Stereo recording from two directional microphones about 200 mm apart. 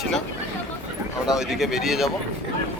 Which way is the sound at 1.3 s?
Centre (ahead or behind).